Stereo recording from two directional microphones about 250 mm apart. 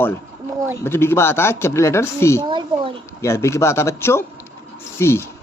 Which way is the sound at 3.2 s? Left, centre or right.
Centre.